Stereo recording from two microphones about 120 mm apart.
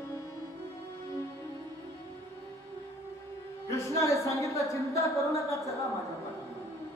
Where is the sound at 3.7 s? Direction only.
25° left (ahead or behind).